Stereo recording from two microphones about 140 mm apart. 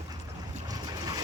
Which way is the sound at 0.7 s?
25° right (ahead or behind).